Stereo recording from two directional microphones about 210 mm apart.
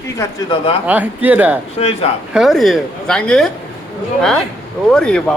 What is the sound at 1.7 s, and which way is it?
Speech, 30° left (ahead or behind).